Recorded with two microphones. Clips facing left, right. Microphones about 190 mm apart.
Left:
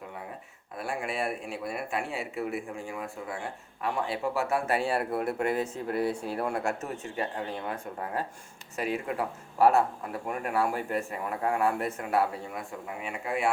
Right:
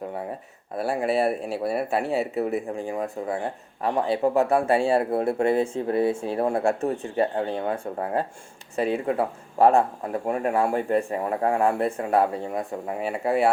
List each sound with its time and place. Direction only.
0.8 s speech: 35° right (ahead or behind)